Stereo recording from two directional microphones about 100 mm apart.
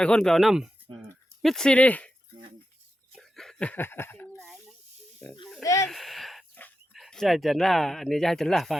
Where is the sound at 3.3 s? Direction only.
5° left (ahead or behind); by 4.2 s 20° left (ahead or behind).